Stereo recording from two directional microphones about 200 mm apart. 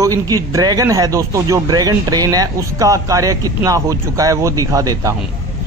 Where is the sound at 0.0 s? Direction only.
15° right (ahead or behind).